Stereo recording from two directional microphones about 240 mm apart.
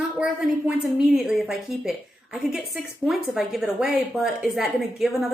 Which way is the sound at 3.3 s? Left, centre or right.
Centre.